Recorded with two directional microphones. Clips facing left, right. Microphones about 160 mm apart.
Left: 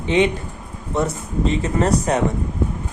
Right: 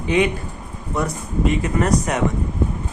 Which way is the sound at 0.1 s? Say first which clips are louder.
Left 1 dB; 25° left (ahead or behind).